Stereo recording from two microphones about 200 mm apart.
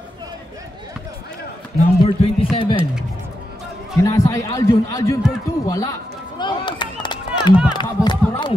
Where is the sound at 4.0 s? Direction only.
15° left (ahead or behind).